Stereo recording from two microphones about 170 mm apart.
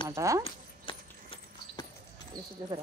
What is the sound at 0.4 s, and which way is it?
Horse, 30° left (ahead or behind).